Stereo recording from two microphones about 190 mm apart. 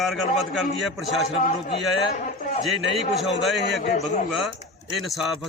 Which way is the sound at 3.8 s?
40° left (ahead or behind).